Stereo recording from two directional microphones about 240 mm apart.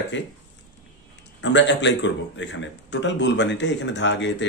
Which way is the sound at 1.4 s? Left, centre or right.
Left.